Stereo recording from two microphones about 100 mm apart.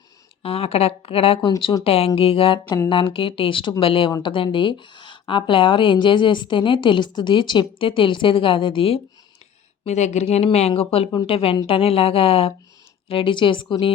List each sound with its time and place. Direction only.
0.4 s speech: 80° left; by 1.7 s 55° left (ahead or behind)
1.8 s speech: 85° left; by 4.1 s 65° left (ahead or behind)
4.2 s speech: 55° left (ahead or behind)
9.8 s speech: 90° left; by 12.5 s 70° left (ahead or behind)
13.1 s speech: 60° left (ahead or behind)